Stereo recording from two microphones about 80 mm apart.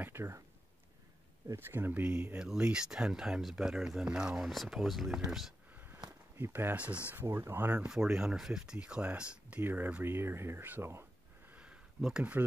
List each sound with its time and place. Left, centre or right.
0.0 s speech: right
1.6 s speech: right; by 5.5 s centre
6.3 s speech: right
7.2 s speech: right
7.8 s speech: centre; by 11.5 s right
11.5 s a sound: centre